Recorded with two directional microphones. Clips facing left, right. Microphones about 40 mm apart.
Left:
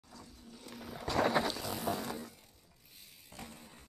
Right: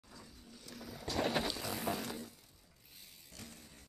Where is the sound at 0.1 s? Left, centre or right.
Centre.